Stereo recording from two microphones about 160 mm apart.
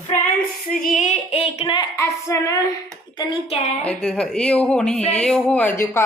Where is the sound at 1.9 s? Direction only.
20° left (ahead or behind).